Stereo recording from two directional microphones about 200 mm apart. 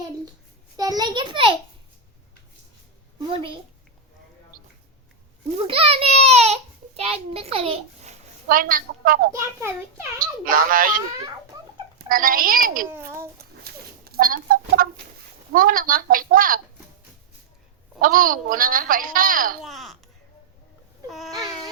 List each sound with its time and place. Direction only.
0.8 s a sound: 20° right (ahead or behind)
3.2 s a woman's voice: 25° right (ahead or behind)
5.6 s a sound: 30° right (ahead or behind)
8.4 s a woman's voice: 45° right (ahead or behind)
14.0 s a sound: 45° right (ahead or behind)
15.5 s a woman's voice: 45° right (ahead or behind)
18.0 s a woman's voice: 45° right (ahead or behind)
19.6 s speech: centre (ahead or behind)
21.1 s speech: centre (ahead or behind)